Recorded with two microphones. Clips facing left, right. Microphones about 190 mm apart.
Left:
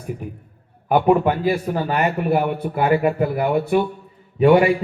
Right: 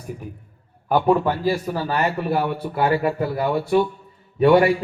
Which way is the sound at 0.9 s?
15° left (ahead or behind).